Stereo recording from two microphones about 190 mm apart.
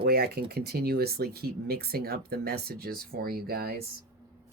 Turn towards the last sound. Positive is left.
turn(degrees=-55)  # may be behind; listen again after turning